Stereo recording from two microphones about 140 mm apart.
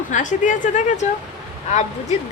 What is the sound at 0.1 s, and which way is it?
Speech, 60° left (ahead or behind).